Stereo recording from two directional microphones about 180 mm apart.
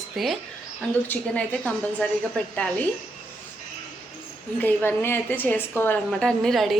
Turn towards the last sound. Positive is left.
turn(degrees=0)  # may be behind; listen again after turning